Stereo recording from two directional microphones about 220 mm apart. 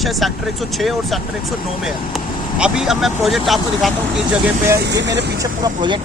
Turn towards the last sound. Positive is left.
turn(degrees=-20)  # may be behind; listen again after turning